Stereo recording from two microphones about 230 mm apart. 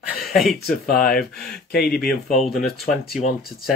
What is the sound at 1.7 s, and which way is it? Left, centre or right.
Speech, left.